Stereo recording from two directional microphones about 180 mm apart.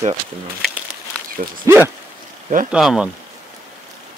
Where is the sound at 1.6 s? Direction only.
15° right (ahead or behind).